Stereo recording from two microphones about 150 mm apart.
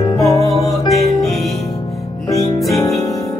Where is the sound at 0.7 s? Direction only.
Centre (ahead or behind).